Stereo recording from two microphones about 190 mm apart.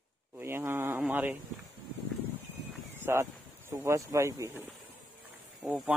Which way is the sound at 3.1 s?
15° right (ahead or behind).